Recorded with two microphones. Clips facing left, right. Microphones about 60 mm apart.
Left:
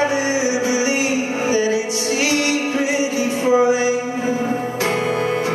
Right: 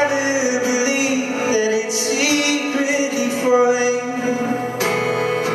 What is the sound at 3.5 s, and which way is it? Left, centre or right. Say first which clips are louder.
Music: right 1 dB; centre.